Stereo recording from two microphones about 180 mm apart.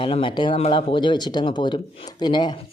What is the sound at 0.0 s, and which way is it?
Speech, 30° left (ahead or behind).